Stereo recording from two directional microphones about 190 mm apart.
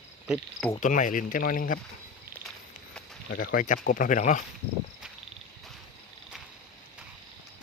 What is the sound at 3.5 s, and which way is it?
Speech, 45° left (ahead or behind).